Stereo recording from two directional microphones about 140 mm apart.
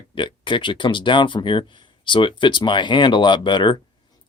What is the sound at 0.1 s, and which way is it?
Speech, 35° left (ahead or behind).